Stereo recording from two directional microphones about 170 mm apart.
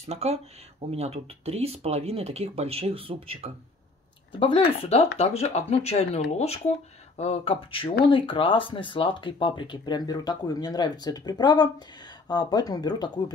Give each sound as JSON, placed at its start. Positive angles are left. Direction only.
{"t": 0.0, "sound": "speech", "side_deg": -40}
{"t": 4.3, "sound": "speech", "side_deg": 30}